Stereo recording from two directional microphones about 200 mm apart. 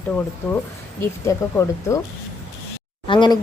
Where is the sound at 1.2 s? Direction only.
15° left (ahead or behind).